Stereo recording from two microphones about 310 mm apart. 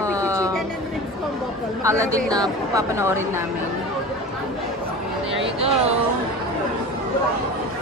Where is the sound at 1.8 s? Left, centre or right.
Centre.